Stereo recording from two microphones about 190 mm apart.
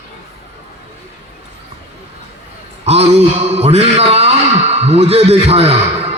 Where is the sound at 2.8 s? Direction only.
35° right (ahead or behind).